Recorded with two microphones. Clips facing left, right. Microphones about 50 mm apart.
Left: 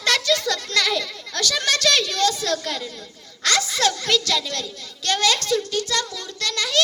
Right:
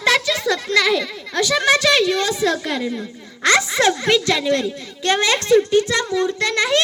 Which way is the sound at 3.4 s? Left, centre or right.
Right.